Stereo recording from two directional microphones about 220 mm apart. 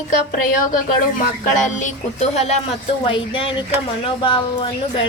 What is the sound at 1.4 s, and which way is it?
A woman's voice, 35° left (ahead or behind).